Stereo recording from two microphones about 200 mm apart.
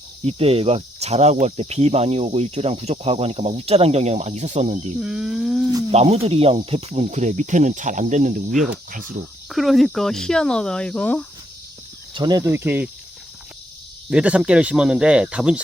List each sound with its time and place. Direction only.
0.3 s cricket: 30° right (ahead or behind)
4.9 s speech: 5° right (ahead or behind)
5.9 s cricket: 30° right (ahead or behind)
8.5 s speech: centre (ahead or behind)
12.1 s cricket: 20° right (ahead or behind)
14.1 s speech: 5° right (ahead or behind)